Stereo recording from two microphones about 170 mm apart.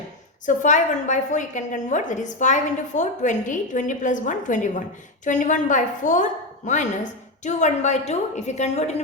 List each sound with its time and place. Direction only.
0.4 s a woman's voice: 45° left (ahead or behind)